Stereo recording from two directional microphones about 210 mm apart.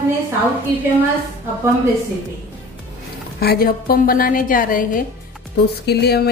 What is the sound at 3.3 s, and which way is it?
A woman's voice, 45° left (ahead or behind).